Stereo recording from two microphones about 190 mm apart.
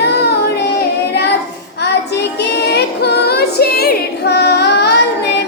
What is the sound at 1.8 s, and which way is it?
Child singing, 60° left (ahead or behind).